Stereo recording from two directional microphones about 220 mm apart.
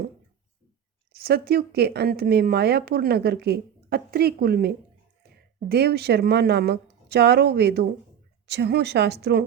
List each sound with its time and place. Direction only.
1.1 s speech: 45° right (ahead or behind)